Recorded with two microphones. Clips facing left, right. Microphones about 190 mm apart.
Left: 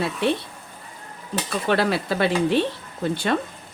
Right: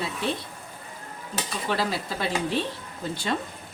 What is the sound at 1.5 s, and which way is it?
Dishes, 65° left (ahead or behind).